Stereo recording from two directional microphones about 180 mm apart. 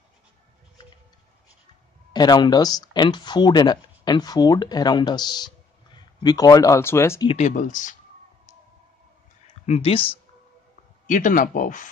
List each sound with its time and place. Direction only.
2.1 s speech: 20° left (ahead or behind)
7.3 s speech: 40° left (ahead or behind)
9.7 s speech: 30° left (ahead or behind)
11.1 s speech: 45° left (ahead or behind)